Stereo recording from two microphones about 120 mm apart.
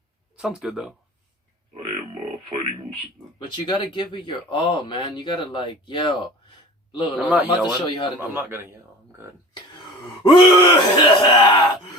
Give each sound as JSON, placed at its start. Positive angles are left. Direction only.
{"t": 0.3, "sound": "speech", "side_deg": -5}
{"t": 3.5, "sound": "speech", "side_deg": 40}
{"t": 7.2, "sound": "a man's voice", "side_deg": -10}
{"t": 7.4, "sound": "speech", "side_deg": 40}
{"t": 8.2, "sound": "a man's voice", "side_deg": -15}
{"t": 9.7, "sound": "speech", "side_deg": 35}